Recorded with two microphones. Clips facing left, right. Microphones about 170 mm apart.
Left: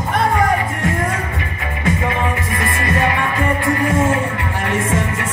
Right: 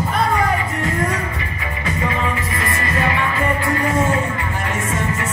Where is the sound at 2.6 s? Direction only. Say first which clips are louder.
Left 4 dB; 50° left (ahead or behind).